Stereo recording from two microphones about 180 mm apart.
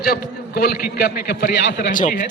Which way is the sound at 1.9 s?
45° left (ahead or behind).